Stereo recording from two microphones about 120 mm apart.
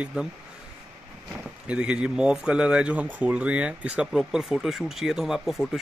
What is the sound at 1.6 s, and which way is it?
A man's voice, 10° right (ahead or behind).